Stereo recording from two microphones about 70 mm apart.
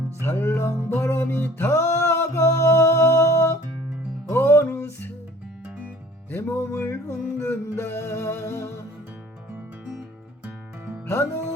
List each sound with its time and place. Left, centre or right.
0.2 s music: left
6.3 s music: left